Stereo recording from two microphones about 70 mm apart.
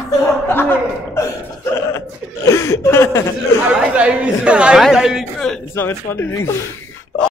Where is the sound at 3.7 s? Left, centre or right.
Centre.